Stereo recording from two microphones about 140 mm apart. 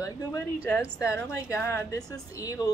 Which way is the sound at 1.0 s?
20° left (ahead or behind).